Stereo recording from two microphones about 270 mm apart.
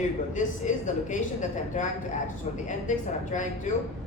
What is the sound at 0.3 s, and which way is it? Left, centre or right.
A woman's voice, left.